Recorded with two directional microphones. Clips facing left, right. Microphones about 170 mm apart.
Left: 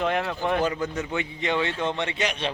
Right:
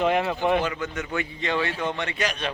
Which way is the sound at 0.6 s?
35° left (ahead or behind).